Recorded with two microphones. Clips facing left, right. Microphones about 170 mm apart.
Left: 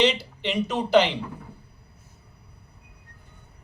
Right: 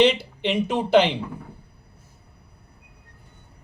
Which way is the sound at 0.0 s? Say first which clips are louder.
Right 4 dB; 55° right (ahead or behind).